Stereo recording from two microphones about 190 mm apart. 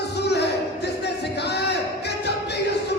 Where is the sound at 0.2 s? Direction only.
60° left (ahead or behind).